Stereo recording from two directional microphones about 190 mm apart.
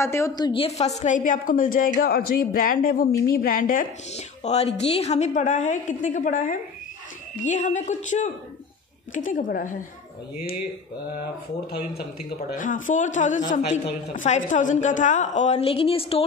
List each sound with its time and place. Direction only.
0.0 s a woman's voice: 15° left (ahead or behind)
0.4 s a woman's voice: 25° left (ahead or behind); by 9.8 s 45° left (ahead or behind)
11.7 s a woman's voice: 55° left (ahead or behind); by 16.3 s 30° left (ahead or behind)